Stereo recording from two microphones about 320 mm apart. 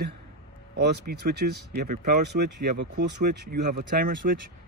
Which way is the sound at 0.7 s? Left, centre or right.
Right.